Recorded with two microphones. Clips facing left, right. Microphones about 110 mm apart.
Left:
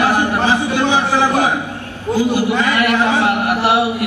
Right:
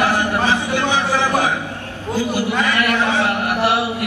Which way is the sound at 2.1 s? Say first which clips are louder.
Left 4 dB; 15° left (ahead or behind).